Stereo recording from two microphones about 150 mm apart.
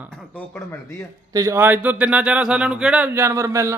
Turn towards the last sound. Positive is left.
turn(degrees=-20)  # may be behind; listen again after turning